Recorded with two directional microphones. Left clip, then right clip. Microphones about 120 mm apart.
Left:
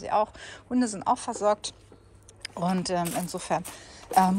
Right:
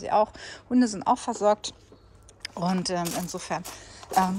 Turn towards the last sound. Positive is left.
turn(degrees=-30)  # may be behind; listen again after turning